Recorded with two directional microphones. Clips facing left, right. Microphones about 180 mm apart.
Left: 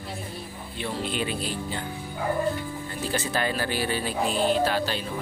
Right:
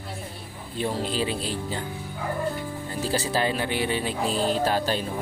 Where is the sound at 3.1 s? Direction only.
30° right (ahead or behind).